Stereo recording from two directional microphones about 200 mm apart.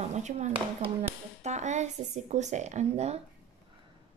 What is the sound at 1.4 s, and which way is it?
Speech, 35° right (ahead or behind).